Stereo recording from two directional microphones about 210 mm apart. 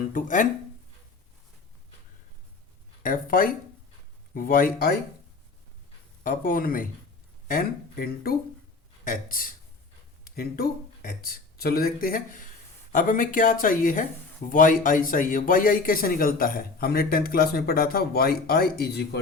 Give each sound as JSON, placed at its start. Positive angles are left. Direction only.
{"t": 0.1, "sound": "speech", "side_deg": 40}
{"t": 3.0, "sound": "speech", "side_deg": 40}
{"t": 6.2, "sound": "a man's voice", "side_deg": 40}